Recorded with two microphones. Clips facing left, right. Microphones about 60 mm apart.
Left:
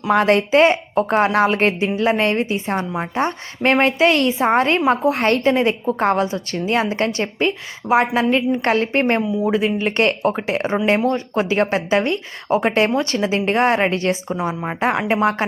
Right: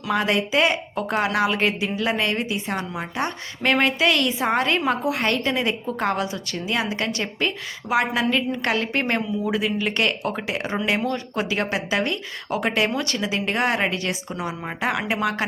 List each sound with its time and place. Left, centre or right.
0.1 s a woman's voice: left